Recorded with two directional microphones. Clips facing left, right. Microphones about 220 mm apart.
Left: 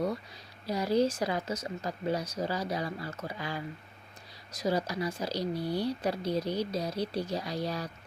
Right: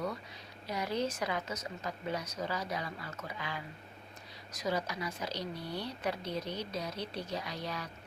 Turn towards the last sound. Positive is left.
turn(degrees=35)  # may be behind; listen again after turning